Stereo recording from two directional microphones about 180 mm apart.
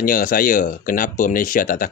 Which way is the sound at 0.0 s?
50° left (ahead or behind).